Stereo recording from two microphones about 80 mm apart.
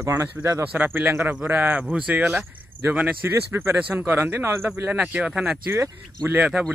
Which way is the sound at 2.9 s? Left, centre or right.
Centre.